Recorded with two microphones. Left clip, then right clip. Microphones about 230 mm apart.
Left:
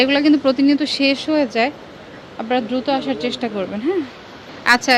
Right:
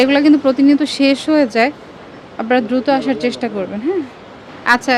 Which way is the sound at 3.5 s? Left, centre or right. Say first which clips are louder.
Right 2 dB; centre.